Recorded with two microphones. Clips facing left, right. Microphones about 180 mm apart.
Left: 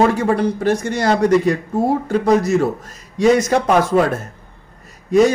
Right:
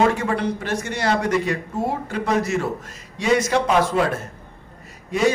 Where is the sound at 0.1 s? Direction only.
40° left (ahead or behind).